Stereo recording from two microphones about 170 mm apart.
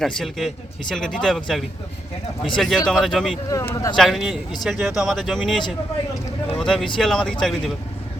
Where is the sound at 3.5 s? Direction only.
20° left (ahead or behind).